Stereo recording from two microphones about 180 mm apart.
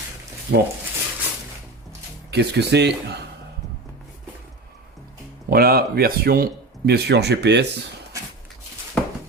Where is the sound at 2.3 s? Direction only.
65° right (ahead or behind).